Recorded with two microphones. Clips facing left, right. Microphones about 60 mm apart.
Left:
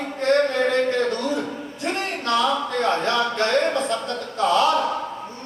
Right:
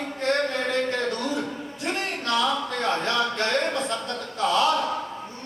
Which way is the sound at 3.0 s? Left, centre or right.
Left.